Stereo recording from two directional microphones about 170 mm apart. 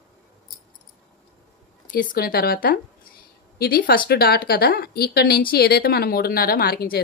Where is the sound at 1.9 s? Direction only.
50° left (ahead or behind).